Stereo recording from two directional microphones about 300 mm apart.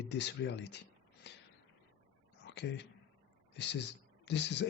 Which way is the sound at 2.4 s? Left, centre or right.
Left.